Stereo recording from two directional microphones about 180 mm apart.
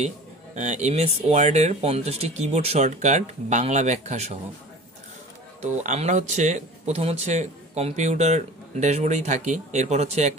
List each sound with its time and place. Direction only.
0.6 s speech: 40° right (ahead or behind)
5.6 s speech: 40° right (ahead or behind)